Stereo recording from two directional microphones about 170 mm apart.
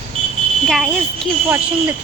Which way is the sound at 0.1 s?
35° right (ahead or behind).